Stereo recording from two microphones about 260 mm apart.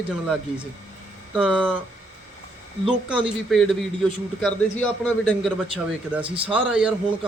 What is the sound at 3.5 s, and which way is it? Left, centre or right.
Speech, centre.